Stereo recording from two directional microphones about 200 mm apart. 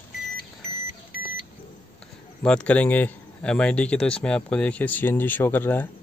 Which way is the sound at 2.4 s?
5° left (ahead or behind).